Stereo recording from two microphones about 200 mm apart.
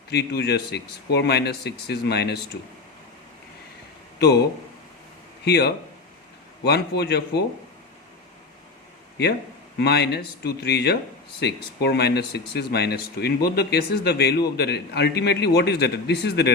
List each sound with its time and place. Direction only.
0.1 s speech: 55° left (ahead or behind)
5.5 s speech: 55° left (ahead or behind)
9.7 s speech: 55° left (ahead or behind)